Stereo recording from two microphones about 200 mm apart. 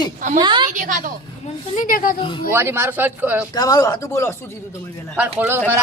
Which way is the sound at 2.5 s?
10° right (ahead or behind).